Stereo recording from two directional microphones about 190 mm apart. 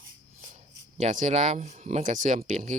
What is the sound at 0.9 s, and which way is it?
Speech, 40° right (ahead or behind).